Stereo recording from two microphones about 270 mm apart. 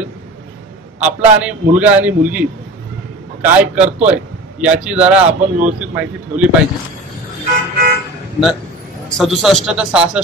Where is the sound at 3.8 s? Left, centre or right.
Right.